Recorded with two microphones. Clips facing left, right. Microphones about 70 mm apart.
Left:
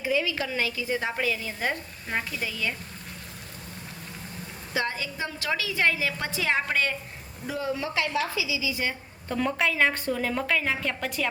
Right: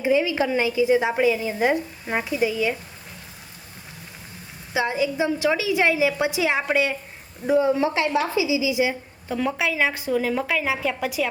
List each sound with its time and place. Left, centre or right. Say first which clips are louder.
0.0 s a woman's voice: right 7 dB; right
4.7 s a woman's voice: right 7 dB; centre
7.4 s a woman's voice: right 11 dB; right; by 11.3 s centre